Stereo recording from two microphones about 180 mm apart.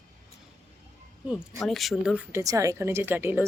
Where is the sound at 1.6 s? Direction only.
Centre (ahead or behind).